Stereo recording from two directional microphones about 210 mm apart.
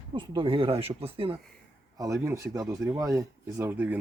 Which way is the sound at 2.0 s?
15° right (ahead or behind).